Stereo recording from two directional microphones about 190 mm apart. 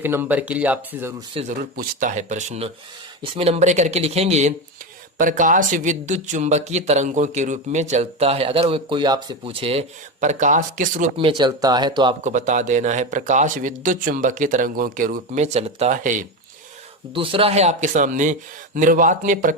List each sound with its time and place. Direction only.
0.0 s speech: 10° right (ahead or behind)
1.3 s speech: 30° right (ahead or behind)
1.7 s speech: 50° right (ahead or behind)
11.2 s speech: 25° right (ahead or behind)
12.2 s speech: 40° right (ahead or behind)
17.2 s speech: 30° right (ahead or behind); by 19.5 s 45° right (ahead or behind)